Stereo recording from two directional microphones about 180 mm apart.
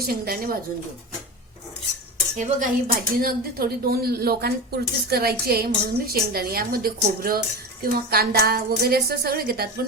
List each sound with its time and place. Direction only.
0.0 s speech: 55° right (ahead or behind)
2.4 s speech: 45° right (ahead or behind)